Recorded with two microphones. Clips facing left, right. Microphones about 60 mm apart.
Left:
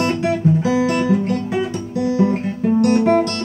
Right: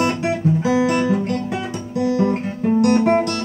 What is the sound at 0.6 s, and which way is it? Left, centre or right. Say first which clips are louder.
Guitar: even; right.